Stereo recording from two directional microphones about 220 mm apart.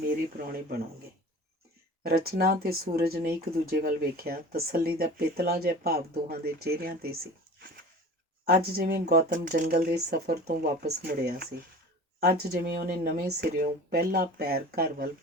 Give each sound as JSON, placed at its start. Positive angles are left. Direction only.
{"t": 0.3, "sound": "speech", "side_deg": -40}
{"t": 2.0, "sound": "speech", "side_deg": -45}
{"t": 8.7, "sound": "speech", "side_deg": -40}